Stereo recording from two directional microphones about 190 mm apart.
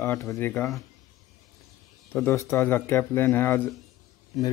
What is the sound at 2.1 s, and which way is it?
A man's voice, 10° left (ahead or behind).